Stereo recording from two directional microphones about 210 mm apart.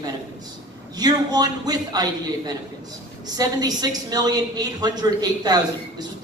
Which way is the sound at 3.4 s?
20° right (ahead or behind).